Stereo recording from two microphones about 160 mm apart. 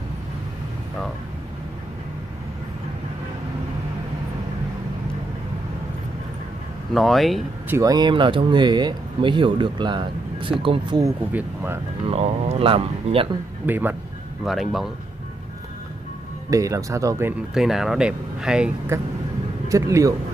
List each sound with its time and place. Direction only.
6.9 s speech: centre (ahead or behind)
7.7 s speech: 25° right (ahead or behind)
11.3 s speech: 15° right (ahead or behind)
12.1 s speech: 40° right (ahead or behind)
13.7 s speech: 10° right (ahead or behind)
14.4 s speech: centre (ahead or behind)
16.4 s speech: 20° right (ahead or behind)
17.6 s speech: centre (ahead or behind)
18.9 s speech: 15° right (ahead or behind)